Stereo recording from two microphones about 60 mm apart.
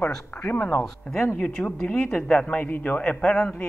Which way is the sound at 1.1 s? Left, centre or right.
Left.